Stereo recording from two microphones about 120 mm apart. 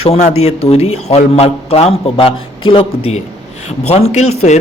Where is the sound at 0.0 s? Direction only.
60° left (ahead or behind).